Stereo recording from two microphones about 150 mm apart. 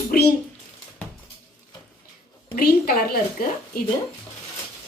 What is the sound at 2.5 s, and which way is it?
Speech, 90° left.